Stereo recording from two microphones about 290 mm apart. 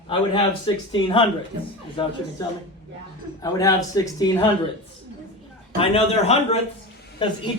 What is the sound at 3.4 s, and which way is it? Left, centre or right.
Speech, centre.